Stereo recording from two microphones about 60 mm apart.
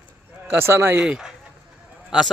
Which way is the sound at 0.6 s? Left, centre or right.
Right.